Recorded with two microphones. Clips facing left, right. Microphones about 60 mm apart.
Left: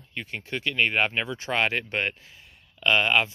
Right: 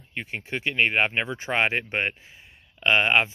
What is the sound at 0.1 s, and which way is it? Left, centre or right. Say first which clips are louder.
Speech: right 1 dB; right.